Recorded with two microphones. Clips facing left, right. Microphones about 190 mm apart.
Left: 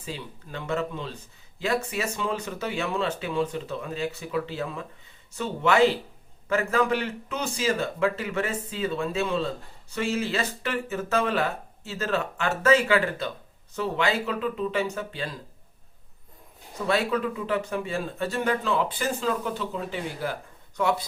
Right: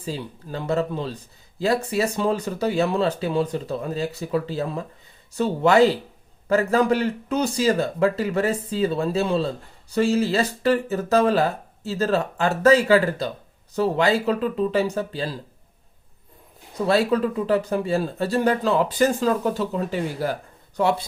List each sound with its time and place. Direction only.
0.0 s speech: 35° right (ahead or behind)
16.7 s speech: 35° right (ahead or behind)